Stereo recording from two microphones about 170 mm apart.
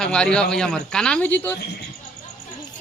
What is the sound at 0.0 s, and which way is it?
Speech, 5° left (ahead or behind).